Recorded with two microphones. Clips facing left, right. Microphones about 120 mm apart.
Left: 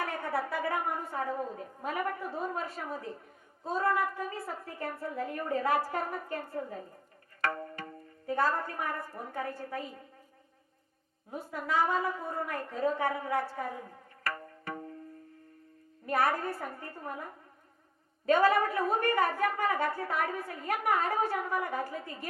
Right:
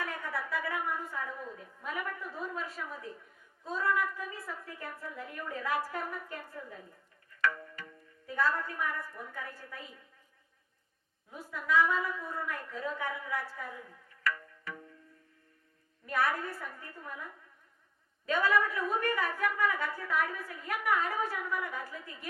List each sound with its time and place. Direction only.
0.0 s a sound: 50° left (ahead or behind)
0.6 s a woman's voice: 40° left (ahead or behind)
7.4 s music: 45° left (ahead or behind)
8.6 s a woman's voice: 45° left (ahead or behind)
11.7 s a woman's voice: 35° left (ahead or behind)
11.9 s a woman's voice: 45° left (ahead or behind)
13.6 s music: 45° left (ahead or behind)
16.0 s a woman's voice: 45° left (ahead or behind)
20.9 s a woman's voice: 35° left (ahead or behind)